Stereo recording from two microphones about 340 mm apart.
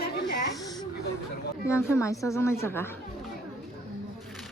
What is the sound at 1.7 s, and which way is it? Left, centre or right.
A woman's voice, centre.